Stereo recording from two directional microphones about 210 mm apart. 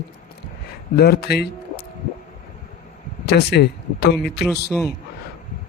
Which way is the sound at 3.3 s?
50° left (ahead or behind).